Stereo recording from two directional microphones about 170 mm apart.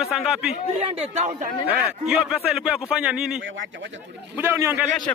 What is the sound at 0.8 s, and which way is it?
Speech, 40° right (ahead or behind).